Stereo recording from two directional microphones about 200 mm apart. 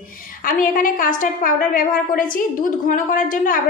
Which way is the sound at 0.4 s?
45° left (ahead or behind).